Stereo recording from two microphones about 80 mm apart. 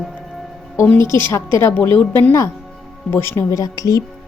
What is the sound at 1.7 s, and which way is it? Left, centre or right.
Speech, left.